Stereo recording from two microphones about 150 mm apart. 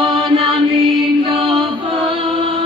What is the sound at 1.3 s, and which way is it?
Music, 35° right (ahead or behind).